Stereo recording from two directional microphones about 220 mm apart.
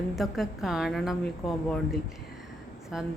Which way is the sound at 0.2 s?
Centre (ahead or behind).